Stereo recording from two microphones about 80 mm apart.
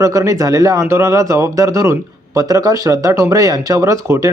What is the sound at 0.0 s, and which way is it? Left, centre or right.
Speech, right.